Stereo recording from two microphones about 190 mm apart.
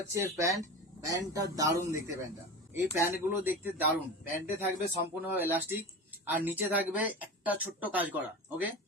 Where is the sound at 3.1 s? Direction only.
10° right (ahead or behind).